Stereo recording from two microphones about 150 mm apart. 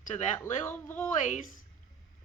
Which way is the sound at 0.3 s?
15° left (ahead or behind).